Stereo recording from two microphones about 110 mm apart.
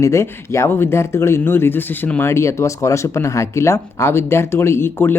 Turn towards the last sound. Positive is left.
turn(degrees=20)  # may be behind; listen again after turning